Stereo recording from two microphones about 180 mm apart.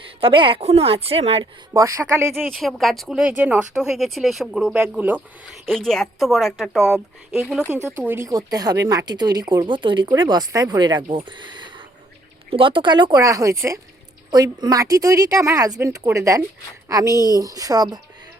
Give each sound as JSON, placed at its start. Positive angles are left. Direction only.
{"t": 0.2, "sound": "speech", "side_deg": -30}
{"t": 1.7, "sound": "speech", "side_deg": -20}
{"t": 2.5, "sound": "speech", "side_deg": 0}
{"t": 5.6, "sound": "speech", "side_deg": 5}